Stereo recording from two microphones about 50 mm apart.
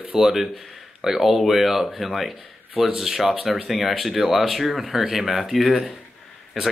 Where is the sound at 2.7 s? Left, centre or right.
Centre.